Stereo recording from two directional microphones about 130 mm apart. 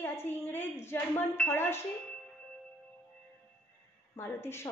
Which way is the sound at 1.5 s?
15° left (ahead or behind).